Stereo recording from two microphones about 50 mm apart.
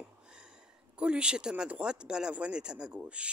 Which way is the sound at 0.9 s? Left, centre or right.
Right.